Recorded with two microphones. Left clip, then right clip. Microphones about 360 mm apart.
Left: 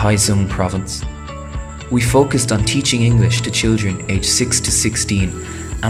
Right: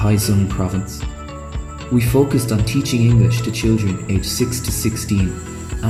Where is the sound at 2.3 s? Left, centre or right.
Centre.